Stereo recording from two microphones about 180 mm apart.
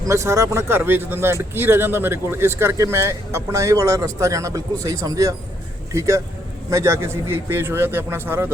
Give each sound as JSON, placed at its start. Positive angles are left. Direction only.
{"t": 0.0, "sound": "speech", "side_deg": -15}